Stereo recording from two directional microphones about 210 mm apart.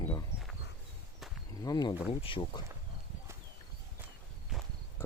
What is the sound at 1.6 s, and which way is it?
Speech, 20° left (ahead or behind).